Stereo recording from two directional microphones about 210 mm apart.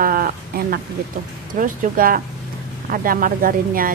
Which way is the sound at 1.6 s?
40° right (ahead or behind).